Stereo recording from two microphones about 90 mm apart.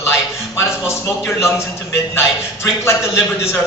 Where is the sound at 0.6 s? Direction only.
30° left (ahead or behind).